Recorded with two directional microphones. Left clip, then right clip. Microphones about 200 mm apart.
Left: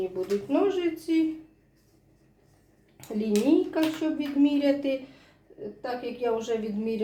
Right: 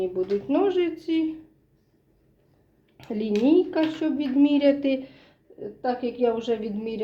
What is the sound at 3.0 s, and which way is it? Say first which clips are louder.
A woman's voice: right 2 dB; 35° right (ahead or behind).